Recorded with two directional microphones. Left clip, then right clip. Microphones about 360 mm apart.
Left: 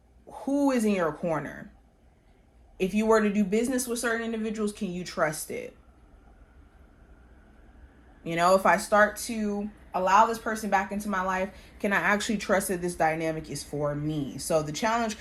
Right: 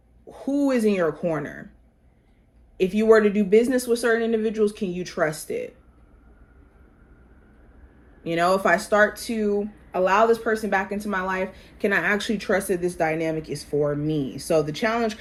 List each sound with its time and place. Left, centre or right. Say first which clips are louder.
0.9 s a woman's voice: right 5 dB; centre
2.8 s a woman's voice: right 6 dB; centre
8.3 s speech: right 1 dB; left
8.9 s a woman's voice: right 3 dB; centre